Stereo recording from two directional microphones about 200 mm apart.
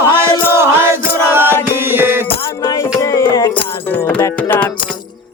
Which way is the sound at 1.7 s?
10° right (ahead or behind).